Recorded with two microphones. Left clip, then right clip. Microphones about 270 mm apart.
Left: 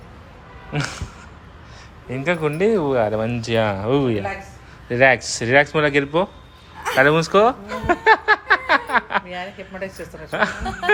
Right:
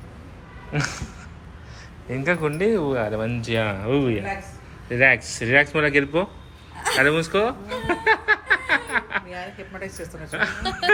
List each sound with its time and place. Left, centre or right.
0.7 s speech: centre
6.9 s a sound: left
10.3 s speech: left
10.7 s speech: centre